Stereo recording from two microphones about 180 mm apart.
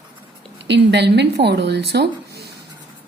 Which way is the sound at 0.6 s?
70° right (ahead or behind).